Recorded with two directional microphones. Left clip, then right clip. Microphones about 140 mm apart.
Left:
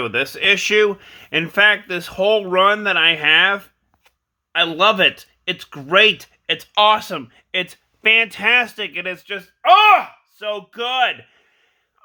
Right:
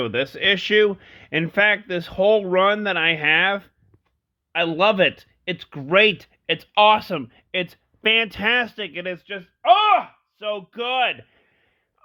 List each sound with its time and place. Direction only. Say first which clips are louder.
0.0 s speech: left 3 dB; 20° right (ahead or behind)